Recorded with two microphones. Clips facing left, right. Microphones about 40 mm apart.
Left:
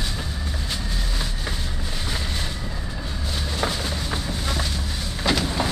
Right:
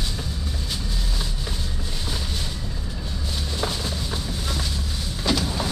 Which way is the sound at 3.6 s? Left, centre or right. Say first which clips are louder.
Left 2 dB; centre.